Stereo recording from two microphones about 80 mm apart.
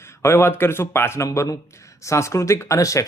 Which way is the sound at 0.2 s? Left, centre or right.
Left.